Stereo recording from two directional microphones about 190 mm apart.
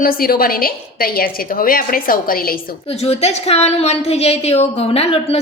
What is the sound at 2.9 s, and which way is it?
A woman's voice, 35° left (ahead or behind).